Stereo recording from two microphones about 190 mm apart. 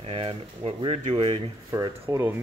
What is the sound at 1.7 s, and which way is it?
Speech, 15° right (ahead or behind).